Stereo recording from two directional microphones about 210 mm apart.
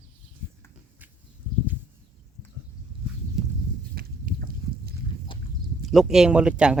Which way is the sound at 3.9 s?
45° right (ahead or behind).